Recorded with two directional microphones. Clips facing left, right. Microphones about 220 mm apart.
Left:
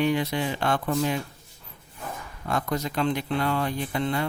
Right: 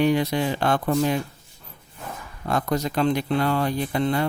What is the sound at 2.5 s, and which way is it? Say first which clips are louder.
Speech: right 4 dB; 35° right (ahead or behind).